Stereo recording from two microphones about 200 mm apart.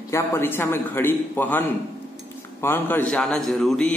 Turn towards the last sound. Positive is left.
turn(degrees=0)  # may be behind; listen again after turning